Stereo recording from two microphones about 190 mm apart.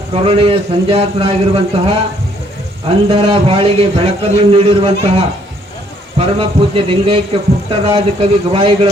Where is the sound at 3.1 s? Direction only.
30° right (ahead or behind).